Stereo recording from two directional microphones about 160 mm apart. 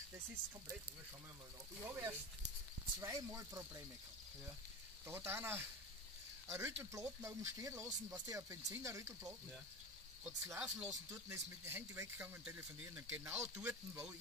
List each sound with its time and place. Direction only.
1.8 s speech: 20° right (ahead or behind)
5.0 s speech: 15° right (ahead or behind)